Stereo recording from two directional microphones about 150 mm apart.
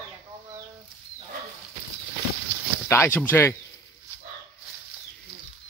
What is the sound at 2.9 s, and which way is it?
Speech, 15° left (ahead or behind).